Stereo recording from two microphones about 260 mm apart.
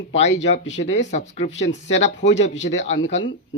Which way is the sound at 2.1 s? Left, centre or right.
Left.